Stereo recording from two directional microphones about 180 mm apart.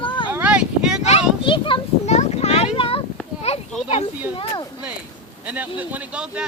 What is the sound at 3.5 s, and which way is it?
Children playing, 35° left (ahead or behind).